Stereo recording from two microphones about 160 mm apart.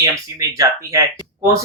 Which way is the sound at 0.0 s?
20° right (ahead or behind).